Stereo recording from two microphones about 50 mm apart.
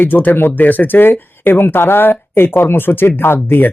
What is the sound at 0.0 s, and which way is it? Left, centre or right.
Speech, left.